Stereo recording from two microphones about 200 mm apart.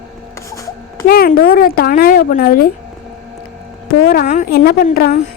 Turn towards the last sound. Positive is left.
turn(degrees=50)  # may be behind; listen again after turning